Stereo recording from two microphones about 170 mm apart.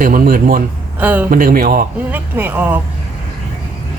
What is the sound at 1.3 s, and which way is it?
Speech, 55° right (ahead or behind).